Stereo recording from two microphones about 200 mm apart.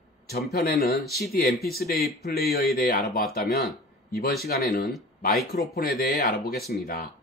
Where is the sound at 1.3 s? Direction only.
50° left (ahead or behind).